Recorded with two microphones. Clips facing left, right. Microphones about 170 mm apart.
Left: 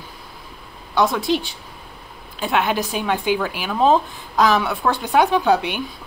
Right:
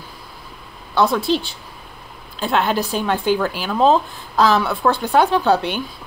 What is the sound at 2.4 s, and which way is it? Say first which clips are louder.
Speech: right 1 dB; 15° left (ahead or behind).